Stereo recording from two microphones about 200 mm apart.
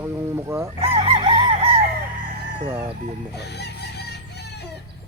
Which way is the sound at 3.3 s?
55° left (ahead or behind).